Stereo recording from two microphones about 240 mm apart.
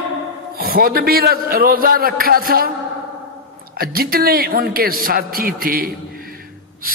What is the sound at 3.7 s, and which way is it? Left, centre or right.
A man's voice, right.